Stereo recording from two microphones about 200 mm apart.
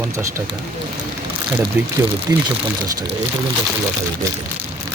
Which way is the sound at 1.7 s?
5° right (ahead or behind).